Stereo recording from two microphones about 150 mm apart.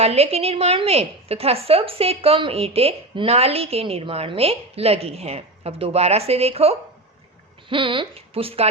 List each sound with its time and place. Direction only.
0.0 s a woman's voice: 45° right (ahead or behind)